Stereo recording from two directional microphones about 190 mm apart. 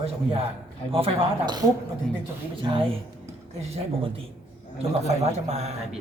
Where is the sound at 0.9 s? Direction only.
30° right (ahead or behind).